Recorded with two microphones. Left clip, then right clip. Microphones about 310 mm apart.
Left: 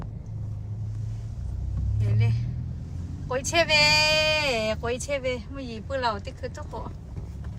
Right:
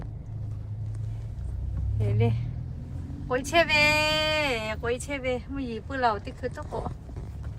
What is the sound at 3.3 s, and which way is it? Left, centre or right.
Speech, centre.